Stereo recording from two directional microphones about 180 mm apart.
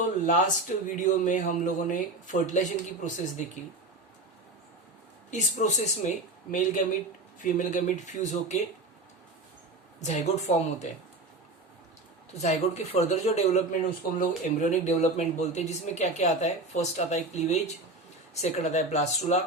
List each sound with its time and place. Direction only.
0.3 s speech: 45° left (ahead or behind)
5.3 s speech: 40° left (ahead or behind)
7.6 s speech: 45° left (ahead or behind)
10.0 s speech: 40° left (ahead or behind)
12.3 s speech: 40° left (ahead or behind)